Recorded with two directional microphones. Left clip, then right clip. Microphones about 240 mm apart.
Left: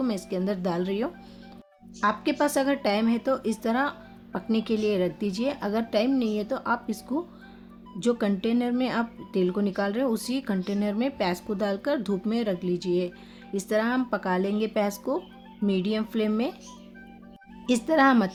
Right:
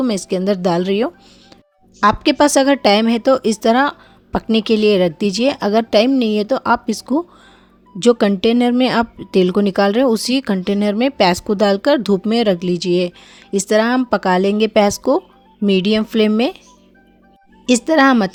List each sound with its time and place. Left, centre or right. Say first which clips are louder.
0.0 s speech: right 11 dB; right
17.7 s speech: right 9 dB; right